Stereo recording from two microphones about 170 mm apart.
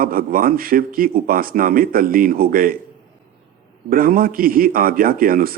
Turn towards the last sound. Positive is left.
turn(degrees=-60)  # may be behind; listen again after turning